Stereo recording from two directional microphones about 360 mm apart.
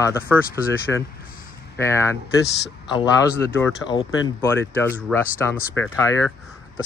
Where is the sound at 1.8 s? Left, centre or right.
Centre.